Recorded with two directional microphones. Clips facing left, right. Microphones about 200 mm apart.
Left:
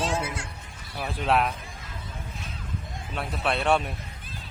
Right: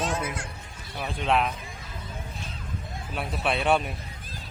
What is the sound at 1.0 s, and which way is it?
Speech, centre (ahead or behind).